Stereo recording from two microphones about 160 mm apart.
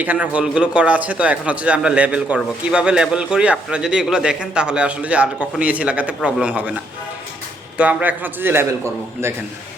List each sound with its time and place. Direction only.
0.0 s speech: 10° right (ahead or behind)
7.8 s speech: 10° right (ahead or behind)